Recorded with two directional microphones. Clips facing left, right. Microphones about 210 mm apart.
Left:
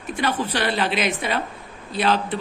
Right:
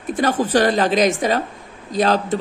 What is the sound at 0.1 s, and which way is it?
A woman's voice, 45° right (ahead or behind).